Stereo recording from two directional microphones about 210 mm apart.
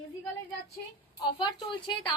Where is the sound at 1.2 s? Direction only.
20° left (ahead or behind).